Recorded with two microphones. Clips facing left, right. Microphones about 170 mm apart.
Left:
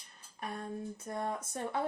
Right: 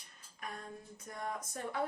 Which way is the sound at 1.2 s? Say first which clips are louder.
Left 1 dB; 30° left (ahead or behind).